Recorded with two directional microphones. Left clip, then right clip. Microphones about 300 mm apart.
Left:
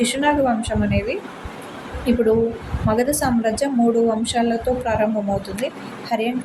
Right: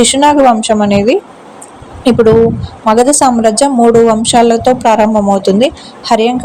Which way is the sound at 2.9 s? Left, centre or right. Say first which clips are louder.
Right 12 dB; right.